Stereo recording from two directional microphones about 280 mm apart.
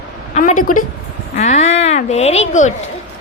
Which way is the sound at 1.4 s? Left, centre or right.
Left.